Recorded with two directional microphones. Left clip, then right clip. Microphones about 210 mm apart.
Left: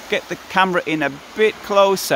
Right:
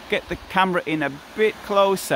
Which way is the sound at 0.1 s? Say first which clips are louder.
Left 3 dB; 5° right (ahead or behind).